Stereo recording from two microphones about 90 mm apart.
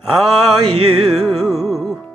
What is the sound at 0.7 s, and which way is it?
Music, centre (ahead or behind).